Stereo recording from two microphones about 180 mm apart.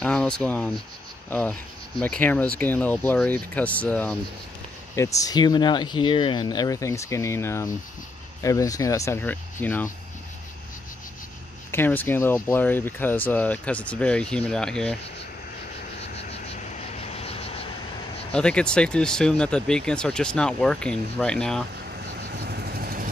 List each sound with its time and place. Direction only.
0.0 s speech: 5° left (ahead or behind)
11.7 s speech: 10° left (ahead or behind)
16.0 s vehicle: 35° left (ahead or behind)
18.3 s speech: 5° left (ahead or behind)
21.7 s vehicle: 65° right (ahead or behind)